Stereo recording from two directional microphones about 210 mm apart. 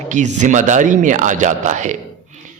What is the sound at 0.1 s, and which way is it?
Speech, 35° right (ahead or behind).